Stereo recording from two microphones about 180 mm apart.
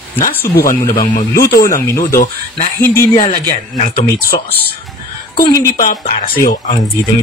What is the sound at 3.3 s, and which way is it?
Speech, 40° left (ahead or behind).